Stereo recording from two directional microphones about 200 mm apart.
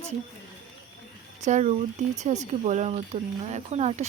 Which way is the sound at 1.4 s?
35° right (ahead or behind).